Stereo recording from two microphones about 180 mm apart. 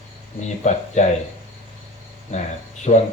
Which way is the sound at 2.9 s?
35° left (ahead or behind).